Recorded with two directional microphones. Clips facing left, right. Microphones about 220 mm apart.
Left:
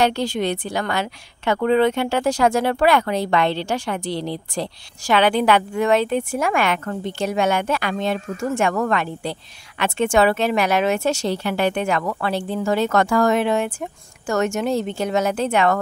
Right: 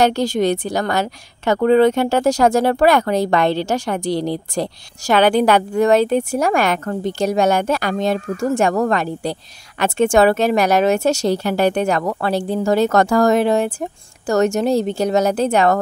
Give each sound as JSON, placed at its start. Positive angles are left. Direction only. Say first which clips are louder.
{"t": 0.0, "sound": "a woman's voice", "louder": "right 4 dB", "side_deg": -40}